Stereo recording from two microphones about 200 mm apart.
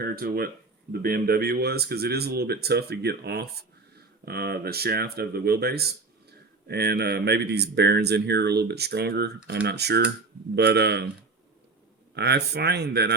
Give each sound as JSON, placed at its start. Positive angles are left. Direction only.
{"t": 0.0, "sound": "speech", "side_deg": -50}
{"t": 12.1, "sound": "speech", "side_deg": -55}